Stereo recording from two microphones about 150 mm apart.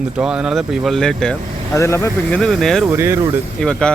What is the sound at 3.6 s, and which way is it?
Speech, 5° left (ahead or behind).